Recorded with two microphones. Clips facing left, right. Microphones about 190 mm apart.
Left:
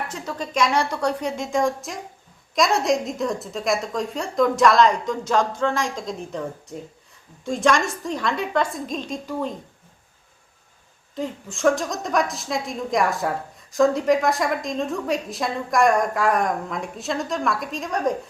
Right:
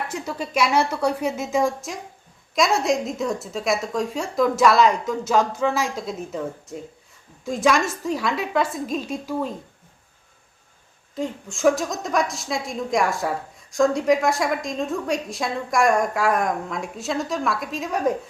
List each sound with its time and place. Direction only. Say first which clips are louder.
0.1 s a woman's voice: right 1 dB; 10° right (ahead or behind)
11.1 s a woman's voice: right 1 dB; centre (ahead or behind)